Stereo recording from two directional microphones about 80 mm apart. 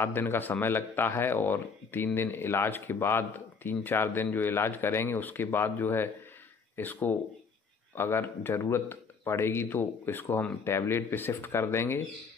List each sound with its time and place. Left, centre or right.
0.0 s speech: left